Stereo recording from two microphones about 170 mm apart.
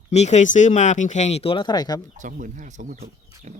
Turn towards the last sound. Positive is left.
turn(degrees=-45)  # may be behind; listen again after turning